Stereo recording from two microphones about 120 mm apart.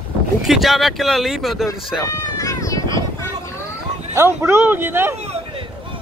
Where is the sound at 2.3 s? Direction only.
25° left (ahead or behind).